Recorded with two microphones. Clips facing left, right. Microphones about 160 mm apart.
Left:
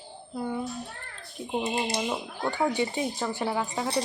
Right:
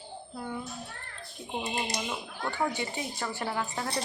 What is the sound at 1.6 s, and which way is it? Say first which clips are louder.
Speech: left 5 dB; 30° left (ahead or behind).